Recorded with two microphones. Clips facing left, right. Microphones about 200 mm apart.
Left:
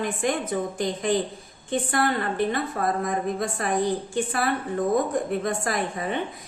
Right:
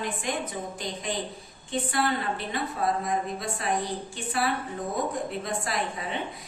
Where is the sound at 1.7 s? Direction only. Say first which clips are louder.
Left 3 dB; 50° left (ahead or behind).